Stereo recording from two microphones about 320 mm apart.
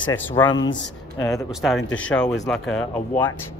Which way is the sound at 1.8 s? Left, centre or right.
Left.